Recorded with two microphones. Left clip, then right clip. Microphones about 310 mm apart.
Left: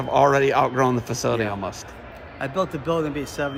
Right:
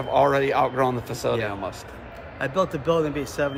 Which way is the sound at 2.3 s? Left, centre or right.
Centre.